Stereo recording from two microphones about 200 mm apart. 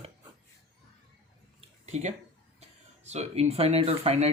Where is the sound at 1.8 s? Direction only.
35° right (ahead or behind).